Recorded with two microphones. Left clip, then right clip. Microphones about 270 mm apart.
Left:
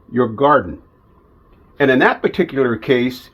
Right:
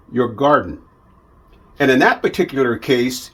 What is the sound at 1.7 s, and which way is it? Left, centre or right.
Speech, centre.